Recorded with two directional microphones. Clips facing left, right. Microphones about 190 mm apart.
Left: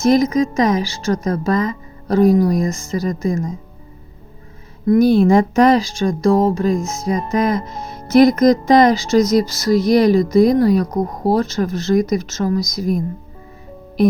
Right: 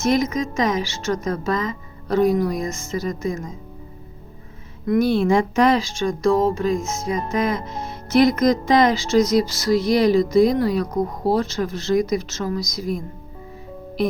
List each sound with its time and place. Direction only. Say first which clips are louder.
0.0 s a woman's voice: left 6 dB; 35° left (ahead or behind)
4.9 s a woman's voice: left 6 dB; 40° left (ahead or behind)